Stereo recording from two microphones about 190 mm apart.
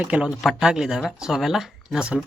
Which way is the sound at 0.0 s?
5° right (ahead or behind).